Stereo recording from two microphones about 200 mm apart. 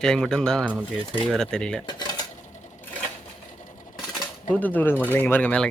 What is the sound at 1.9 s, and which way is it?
Cutlery, 20° left (ahead or behind).